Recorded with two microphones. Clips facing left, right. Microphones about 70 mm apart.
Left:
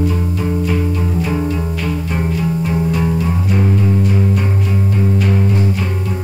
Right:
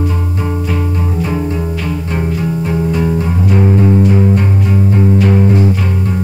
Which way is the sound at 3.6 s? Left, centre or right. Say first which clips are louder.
Right 6 dB; right.